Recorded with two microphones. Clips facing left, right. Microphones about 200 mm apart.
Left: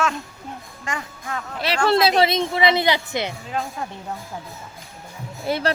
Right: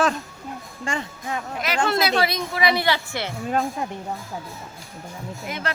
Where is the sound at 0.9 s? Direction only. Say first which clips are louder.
Right 2 dB; 30° right (ahead or behind).